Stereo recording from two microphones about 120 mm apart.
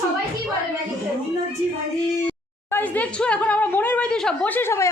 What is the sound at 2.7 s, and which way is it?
A woman's voice, 15° left (ahead or behind).